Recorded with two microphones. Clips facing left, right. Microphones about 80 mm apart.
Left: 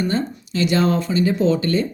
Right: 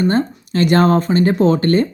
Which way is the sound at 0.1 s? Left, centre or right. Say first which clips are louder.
Right 5 dB; right.